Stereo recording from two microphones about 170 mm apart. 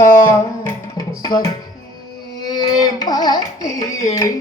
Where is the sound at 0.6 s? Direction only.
20° left (ahead or behind).